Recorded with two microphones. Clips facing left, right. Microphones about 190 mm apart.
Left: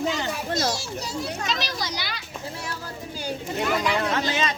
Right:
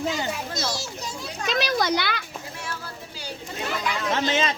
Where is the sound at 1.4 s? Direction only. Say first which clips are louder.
Right 6 dB; 55° right (ahead or behind).